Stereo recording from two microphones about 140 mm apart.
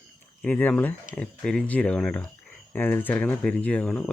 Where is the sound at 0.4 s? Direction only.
10° left (ahead or behind).